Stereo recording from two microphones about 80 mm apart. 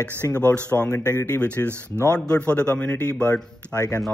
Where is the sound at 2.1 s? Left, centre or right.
Centre.